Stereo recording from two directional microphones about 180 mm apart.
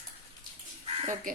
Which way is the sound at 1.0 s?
40° right (ahead or behind).